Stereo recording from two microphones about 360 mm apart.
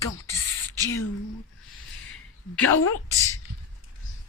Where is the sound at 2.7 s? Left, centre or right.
Left.